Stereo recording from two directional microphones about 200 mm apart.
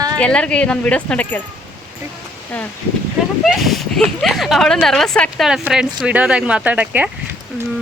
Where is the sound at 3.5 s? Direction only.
Centre (ahead or behind).